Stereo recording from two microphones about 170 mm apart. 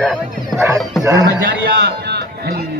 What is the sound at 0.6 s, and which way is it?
Speech, 15° right (ahead or behind).